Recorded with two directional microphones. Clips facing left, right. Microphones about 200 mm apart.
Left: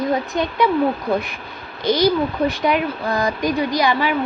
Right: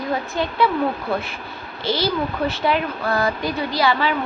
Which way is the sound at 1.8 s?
15° left (ahead or behind).